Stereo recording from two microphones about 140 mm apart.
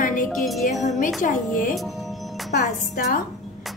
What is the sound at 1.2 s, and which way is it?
A woman's voice, 70° left (ahead or behind).